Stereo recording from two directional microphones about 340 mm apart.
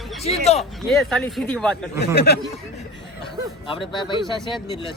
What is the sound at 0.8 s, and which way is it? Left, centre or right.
Speech, centre.